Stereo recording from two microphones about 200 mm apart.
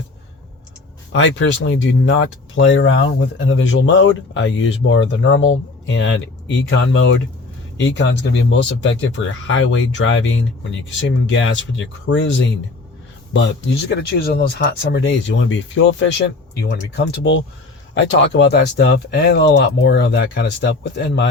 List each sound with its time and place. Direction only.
1.1 s speech: 65° left (ahead or behind)
13.3 s speech: 65° left (ahead or behind)
13.9 s speech: 50° left (ahead or behind)